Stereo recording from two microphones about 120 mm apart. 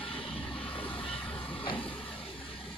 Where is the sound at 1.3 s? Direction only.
45° left (ahead or behind).